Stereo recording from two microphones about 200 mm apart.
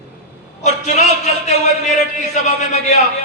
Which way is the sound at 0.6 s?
35° left (ahead or behind).